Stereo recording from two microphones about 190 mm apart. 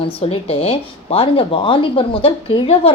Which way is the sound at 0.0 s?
30° left (ahead or behind).